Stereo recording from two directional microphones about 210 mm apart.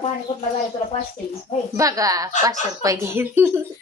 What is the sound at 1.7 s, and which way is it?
A woman's voice, 15° right (ahead or behind).